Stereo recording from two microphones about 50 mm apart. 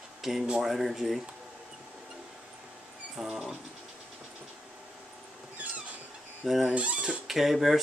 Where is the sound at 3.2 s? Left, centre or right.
Centre.